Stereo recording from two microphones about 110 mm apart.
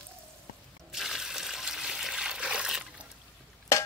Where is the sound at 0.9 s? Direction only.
5° right (ahead or behind).